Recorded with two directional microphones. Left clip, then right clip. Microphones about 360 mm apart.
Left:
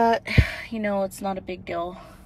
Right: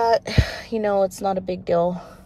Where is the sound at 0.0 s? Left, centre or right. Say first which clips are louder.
Right 2 dB; centre.